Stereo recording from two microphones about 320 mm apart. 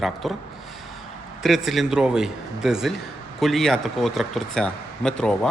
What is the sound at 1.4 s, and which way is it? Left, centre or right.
A man's voice, centre.